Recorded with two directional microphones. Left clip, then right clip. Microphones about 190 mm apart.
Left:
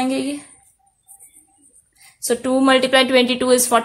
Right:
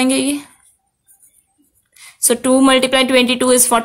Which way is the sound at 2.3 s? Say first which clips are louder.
Right 3 dB; 40° right (ahead or behind).